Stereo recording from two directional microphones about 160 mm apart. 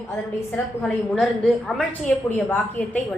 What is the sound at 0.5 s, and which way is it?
A woman's voice, 10° left (ahead or behind).